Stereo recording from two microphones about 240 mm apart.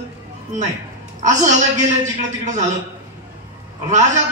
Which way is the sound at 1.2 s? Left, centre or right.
Right.